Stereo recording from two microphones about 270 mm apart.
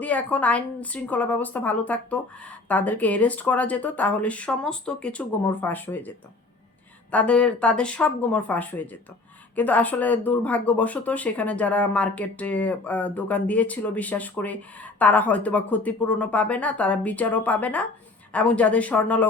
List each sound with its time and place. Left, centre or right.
0.0 s speech: centre